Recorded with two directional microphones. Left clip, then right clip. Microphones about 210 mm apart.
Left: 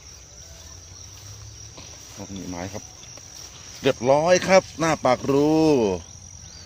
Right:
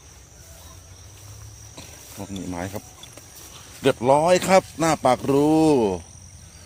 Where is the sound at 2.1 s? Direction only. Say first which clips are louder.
Right 3 dB; 25° right (ahead or behind).